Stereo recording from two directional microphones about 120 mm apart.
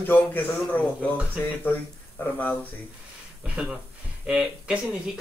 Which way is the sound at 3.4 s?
10° right (ahead or behind).